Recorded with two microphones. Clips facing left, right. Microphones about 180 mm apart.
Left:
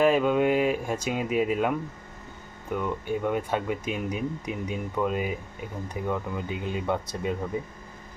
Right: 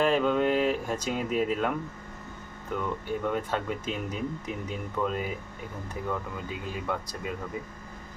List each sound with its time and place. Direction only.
0.0 s speech: 10° left (ahead or behind)
2.7 s speech: 15° left (ahead or behind)